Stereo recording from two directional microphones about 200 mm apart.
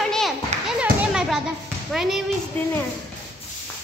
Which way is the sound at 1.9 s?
Centre (ahead or behind).